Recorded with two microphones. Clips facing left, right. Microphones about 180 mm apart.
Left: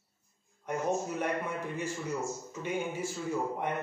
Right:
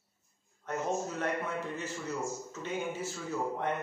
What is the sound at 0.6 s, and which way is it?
A man's voice, 10° left (ahead or behind).